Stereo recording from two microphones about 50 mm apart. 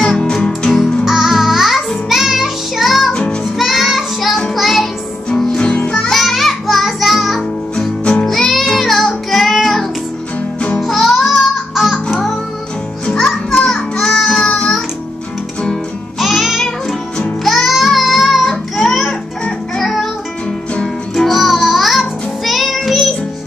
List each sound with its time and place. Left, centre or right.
0.2 s music: centre
1.0 s music: centre
3.1 s music: centre
3.5 s child singing: centre
4.6 s music: centre
5.6 s music: left; by 7.9 s centre
8.0 s music: left
8.3 s music: centre
13.0 s music: centre
16.2 s music: centre
21.2 s music: centre